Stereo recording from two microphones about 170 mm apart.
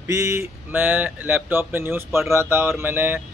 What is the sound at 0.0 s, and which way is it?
Speech, 20° right (ahead or behind).